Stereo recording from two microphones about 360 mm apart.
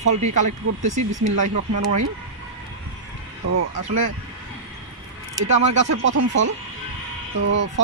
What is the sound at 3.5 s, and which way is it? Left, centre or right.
Speech, right.